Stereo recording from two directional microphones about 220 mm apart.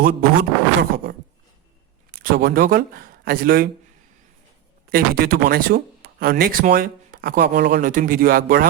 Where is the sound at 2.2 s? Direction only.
45° right (ahead or behind).